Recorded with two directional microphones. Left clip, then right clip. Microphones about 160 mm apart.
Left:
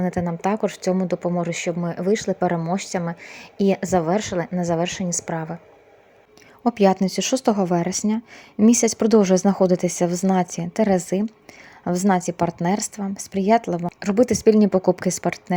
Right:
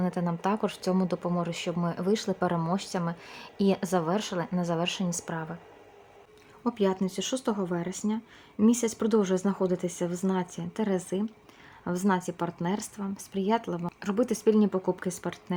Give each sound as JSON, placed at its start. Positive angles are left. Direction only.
{"t": 0.0, "sound": "speech", "side_deg": 20}
{"t": 6.7, "sound": "a woman's voice", "side_deg": 40}